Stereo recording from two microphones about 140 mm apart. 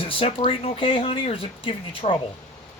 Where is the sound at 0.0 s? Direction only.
40° left (ahead or behind).